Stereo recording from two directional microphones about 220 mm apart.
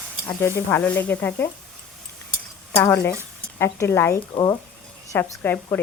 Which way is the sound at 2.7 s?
10° left (ahead or behind).